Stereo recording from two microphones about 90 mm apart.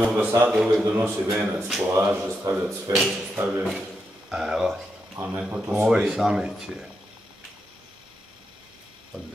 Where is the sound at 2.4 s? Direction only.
35° right (ahead or behind).